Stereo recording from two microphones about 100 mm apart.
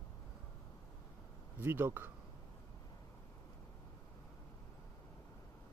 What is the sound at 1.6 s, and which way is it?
Speech, 25° right (ahead or behind).